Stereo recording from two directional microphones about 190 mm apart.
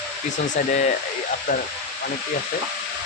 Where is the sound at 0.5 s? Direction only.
40° left (ahead or behind).